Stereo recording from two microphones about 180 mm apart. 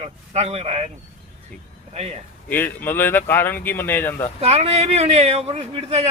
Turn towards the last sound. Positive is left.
turn(degrees=-35)  # may be behind; listen again after turning